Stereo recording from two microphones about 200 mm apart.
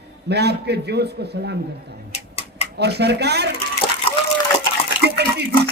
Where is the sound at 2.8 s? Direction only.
55° right (ahead or behind).